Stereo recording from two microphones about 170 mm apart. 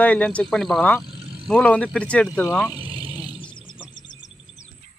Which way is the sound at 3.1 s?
10° right (ahead or behind).